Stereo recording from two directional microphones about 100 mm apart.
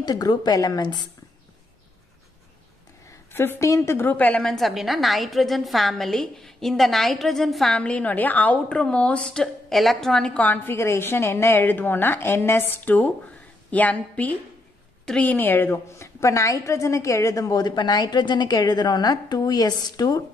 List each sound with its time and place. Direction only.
0.0 s a woman's voice: 45° left (ahead or behind)
3.3 s a woman's voice: 25° left (ahead or behind)
4.4 s a woman's voice: 5° left (ahead or behind); by 20.2 s 40° left (ahead or behind)